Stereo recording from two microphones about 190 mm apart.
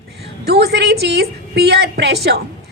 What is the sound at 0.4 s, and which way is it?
A woman's voice, 55° right (ahead or behind).